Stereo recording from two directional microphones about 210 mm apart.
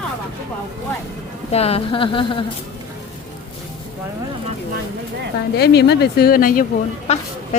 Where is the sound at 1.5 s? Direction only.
30° left (ahead or behind).